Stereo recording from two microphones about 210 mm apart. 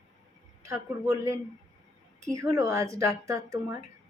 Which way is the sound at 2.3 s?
15° right (ahead or behind).